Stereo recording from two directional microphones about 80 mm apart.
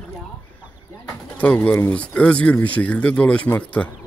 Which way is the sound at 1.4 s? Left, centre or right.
Left.